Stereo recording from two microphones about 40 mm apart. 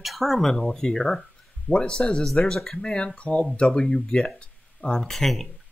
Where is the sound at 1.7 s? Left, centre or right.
Left.